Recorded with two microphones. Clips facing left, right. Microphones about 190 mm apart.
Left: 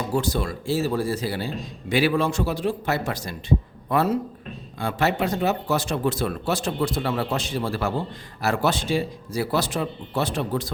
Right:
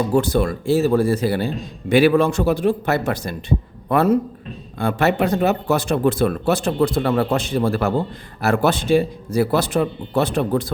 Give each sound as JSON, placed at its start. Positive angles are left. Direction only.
{"t": 0.1, "sound": "speech", "side_deg": -60}